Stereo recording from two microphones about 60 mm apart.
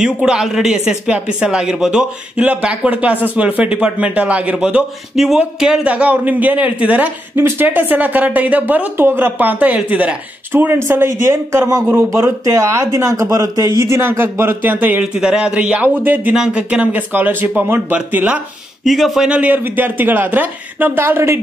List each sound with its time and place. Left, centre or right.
0.0 s speech: centre
5.1 s speech: centre; by 7.1 s right
7.3 s speech: right
8.9 s speech: right
10.5 s speech: right
12.1 s a man's voice: right
15.1 s speech: centre; by 16.3 s right
16.3 s speech: centre; by 17.9 s right
18.9 s speech: centre
19.2 s speech: centre
19.5 s speech: right
21.0 s a man's voice: right